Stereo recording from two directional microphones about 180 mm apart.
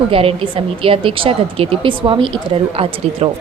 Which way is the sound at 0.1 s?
30° right (ahead or behind).